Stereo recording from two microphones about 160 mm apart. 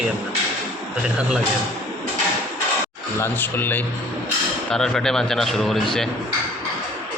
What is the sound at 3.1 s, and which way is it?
Speech, 15° left (ahead or behind).